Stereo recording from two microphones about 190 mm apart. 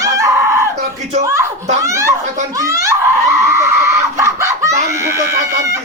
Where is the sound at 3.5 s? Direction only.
15° right (ahead or behind).